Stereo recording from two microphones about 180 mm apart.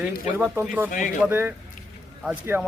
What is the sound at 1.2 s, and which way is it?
Speech, 10° right (ahead or behind).